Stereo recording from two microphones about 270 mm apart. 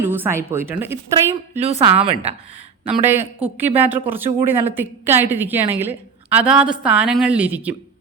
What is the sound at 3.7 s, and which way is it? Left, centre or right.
A woman's voice, centre.